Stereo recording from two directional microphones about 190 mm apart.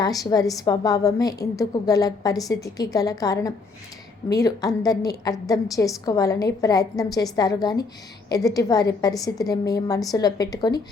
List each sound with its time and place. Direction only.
0.0 s a woman's voice: 20° left (ahead or behind)